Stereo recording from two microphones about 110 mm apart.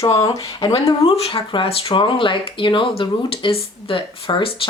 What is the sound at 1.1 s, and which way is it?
A woman's voice, 55° left (ahead or behind).